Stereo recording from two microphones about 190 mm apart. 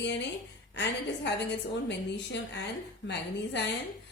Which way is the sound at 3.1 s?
65° left (ahead or behind).